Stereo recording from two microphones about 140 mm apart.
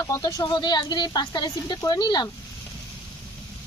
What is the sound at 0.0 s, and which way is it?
Speech, 25° left (ahead or behind).